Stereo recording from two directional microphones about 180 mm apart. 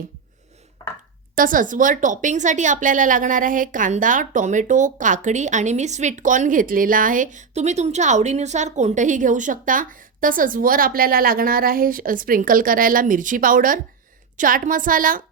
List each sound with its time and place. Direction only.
1.4 s a woman's voice: 50° right (ahead or behind)